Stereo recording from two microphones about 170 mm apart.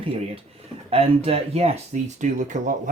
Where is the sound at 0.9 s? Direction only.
35° right (ahead or behind).